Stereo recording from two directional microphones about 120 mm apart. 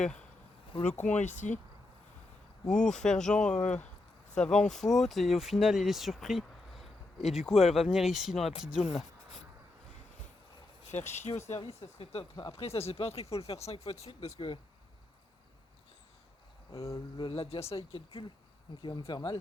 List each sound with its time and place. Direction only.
0.9 s speech: 10° left (ahead or behind)
1.1 s speech: 80° left
2.6 s speech: 5° left (ahead or behind)
10.9 s speech: 70° left (ahead or behind)
11.4 s speech: 60° left (ahead or behind)
16.7 s cricket: 25° left (ahead or behind)
17.2 s speech: 45° left (ahead or behind)
18.8 s speech: 40° left (ahead or behind)